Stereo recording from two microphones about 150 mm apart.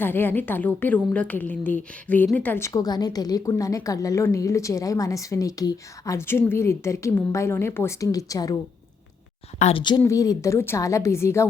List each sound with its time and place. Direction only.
0.0 s a woman's voice: 15° left (ahead or behind)
9.6 s a woman's voice: 45° left (ahead or behind)
10.0 s a woman's voice: 20° left (ahead or behind)